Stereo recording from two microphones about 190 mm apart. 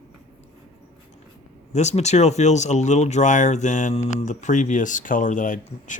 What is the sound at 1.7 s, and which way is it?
Speech, 35° left (ahead or behind).